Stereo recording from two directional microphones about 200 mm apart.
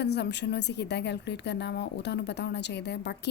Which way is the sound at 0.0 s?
55° left (ahead or behind).